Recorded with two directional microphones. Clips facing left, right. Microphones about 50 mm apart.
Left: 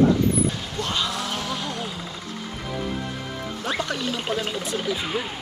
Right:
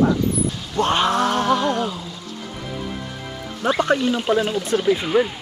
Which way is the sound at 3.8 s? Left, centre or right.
Right.